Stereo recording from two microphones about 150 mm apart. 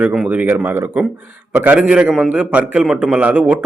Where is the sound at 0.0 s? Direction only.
10° right (ahead or behind).